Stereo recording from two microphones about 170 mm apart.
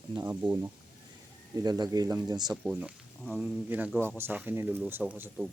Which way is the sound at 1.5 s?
20° right (ahead or behind).